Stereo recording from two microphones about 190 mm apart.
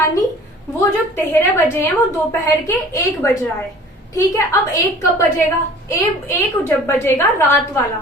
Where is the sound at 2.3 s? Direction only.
15° left (ahead or behind).